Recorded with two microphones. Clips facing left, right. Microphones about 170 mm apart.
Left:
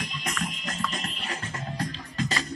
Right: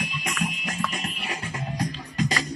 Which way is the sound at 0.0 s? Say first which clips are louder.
Right 3 dB; 10° right (ahead or behind).